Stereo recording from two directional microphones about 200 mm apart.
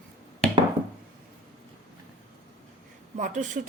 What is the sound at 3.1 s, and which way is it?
Speech, 40° right (ahead or behind).